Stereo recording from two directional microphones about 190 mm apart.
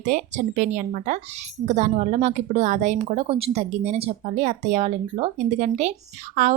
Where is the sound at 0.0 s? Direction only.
40° right (ahead or behind).